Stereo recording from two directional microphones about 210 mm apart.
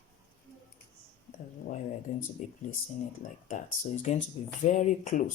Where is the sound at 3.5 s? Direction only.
35° left (ahead or behind).